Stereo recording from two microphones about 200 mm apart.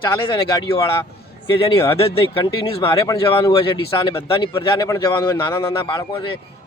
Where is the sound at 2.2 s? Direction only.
25° left (ahead or behind).